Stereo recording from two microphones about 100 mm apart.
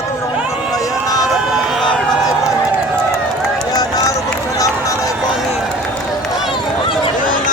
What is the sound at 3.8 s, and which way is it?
Run, 40° left (ahead or behind).